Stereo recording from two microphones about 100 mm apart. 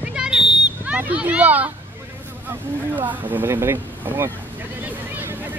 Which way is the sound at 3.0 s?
20° right (ahead or behind).